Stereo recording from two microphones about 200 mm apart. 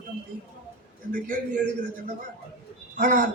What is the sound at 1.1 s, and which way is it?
Speech, 40° right (ahead or behind).